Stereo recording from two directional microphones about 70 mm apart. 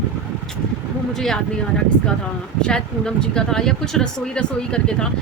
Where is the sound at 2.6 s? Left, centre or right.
Centre.